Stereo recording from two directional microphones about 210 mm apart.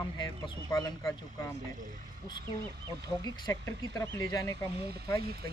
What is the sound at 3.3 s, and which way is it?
Speech, 20° left (ahead or behind).